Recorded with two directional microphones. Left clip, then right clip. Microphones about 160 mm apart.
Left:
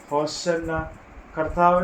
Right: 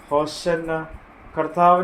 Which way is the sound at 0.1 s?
55° right (ahead or behind).